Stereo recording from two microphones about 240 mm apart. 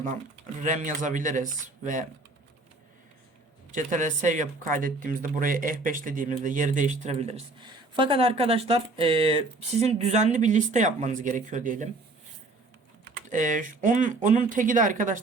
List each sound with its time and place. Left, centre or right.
0.6 s speech: right
3.7 s speech: right
13.3 s speech: right